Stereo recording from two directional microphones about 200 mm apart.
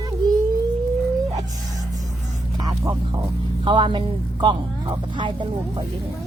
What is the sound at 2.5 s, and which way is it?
Vehicle, 20° right (ahead or behind).